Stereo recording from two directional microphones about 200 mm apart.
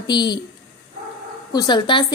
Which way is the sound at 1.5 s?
20° left (ahead or behind).